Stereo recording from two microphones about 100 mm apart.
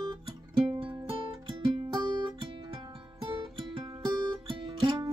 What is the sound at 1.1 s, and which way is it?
Music, 55° right (ahead or behind).